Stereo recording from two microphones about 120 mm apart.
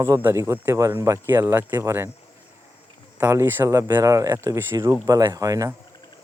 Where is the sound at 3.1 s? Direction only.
20° right (ahead or behind).